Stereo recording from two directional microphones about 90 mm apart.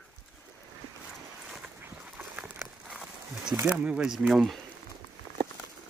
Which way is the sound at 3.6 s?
15° right (ahead or behind).